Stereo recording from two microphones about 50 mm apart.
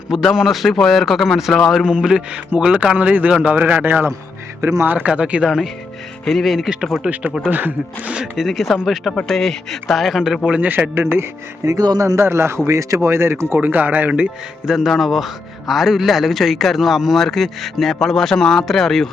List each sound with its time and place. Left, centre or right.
0.1 s a man's voice: centre; by 4.0 s right
4.6 s speech: right
4.9 s speech: right
6.2 s a man's voice: centre
7.1 s speech: right
7.5 s speech: right
8.4 s a man's voice: centre
9.2 s a man's voice: centre
10.6 s speech: right
10.9 s speech: right
11.6 s speech: right
13.6 s speech: right
14.7 s a man's voice: centre